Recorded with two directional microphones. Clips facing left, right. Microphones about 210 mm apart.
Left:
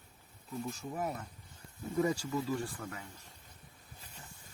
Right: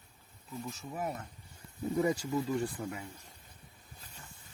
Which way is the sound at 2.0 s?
15° right (ahead or behind).